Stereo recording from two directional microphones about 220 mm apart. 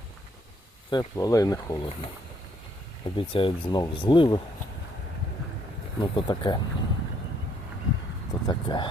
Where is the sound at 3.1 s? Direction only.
25° left (ahead or behind).